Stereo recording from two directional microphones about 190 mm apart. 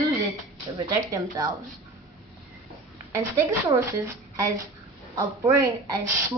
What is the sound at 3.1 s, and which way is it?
A woman's voice, 15° right (ahead or behind).